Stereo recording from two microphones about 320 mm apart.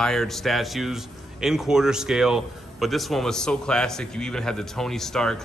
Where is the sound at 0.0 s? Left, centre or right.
Centre.